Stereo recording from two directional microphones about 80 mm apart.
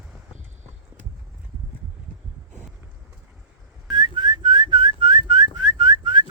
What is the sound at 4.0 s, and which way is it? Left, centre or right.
Whistling, right.